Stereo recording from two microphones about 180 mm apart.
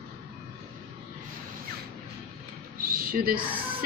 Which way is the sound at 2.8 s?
50° right (ahead or behind).